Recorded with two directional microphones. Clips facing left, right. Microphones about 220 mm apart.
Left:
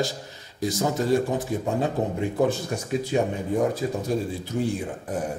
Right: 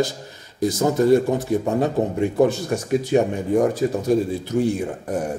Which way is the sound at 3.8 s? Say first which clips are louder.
Right 6 dB; 55° right (ahead or behind).